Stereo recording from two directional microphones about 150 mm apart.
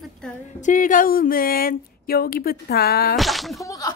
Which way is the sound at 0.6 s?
60° left (ahead or behind).